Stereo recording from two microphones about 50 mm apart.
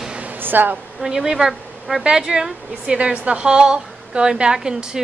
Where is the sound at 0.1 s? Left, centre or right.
Right.